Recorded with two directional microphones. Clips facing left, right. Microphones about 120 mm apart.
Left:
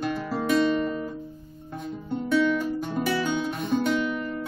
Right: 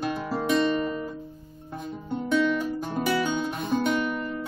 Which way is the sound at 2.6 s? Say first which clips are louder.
Left 1 dB; 15° right (ahead or behind).